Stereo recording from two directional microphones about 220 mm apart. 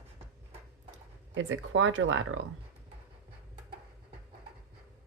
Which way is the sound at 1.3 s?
55° right (ahead or behind).